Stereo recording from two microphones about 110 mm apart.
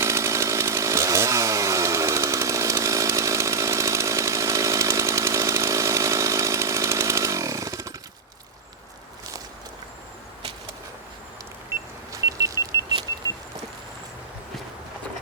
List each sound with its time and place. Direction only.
0.0 s chainsaw: 25° right (ahead or behind)
11.7 s car: 30° right (ahead or behind)